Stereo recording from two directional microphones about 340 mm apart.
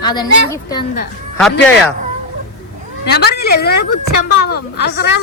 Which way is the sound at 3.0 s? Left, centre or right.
Left.